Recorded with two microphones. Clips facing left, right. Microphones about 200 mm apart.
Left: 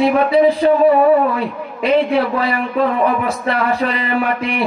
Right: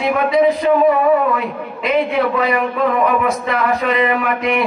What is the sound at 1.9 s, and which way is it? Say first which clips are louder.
Speech: left 2 dB; 30° left (ahead or behind).